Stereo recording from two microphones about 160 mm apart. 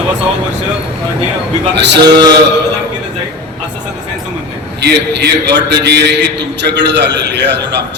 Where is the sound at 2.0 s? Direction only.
25° right (ahead or behind).